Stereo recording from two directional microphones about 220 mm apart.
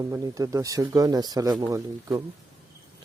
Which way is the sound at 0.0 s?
15° right (ahead or behind).